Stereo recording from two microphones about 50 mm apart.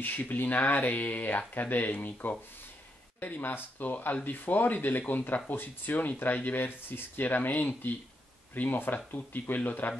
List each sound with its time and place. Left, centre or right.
0.0 s speech: left